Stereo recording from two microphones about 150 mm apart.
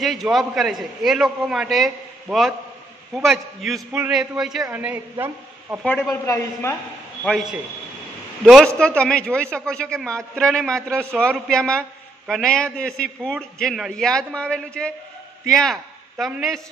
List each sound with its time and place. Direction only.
0.0 s a man's voice: centre (ahead or behind)
5.9 s a man's voice: 15° left (ahead or behind)
7.2 s a man's voice: centre (ahead or behind)
8.7 s a man's voice: 5° left (ahead or behind)